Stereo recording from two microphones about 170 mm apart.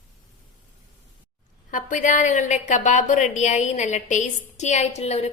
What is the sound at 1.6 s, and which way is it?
A woman's voice, 50° left (ahead or behind).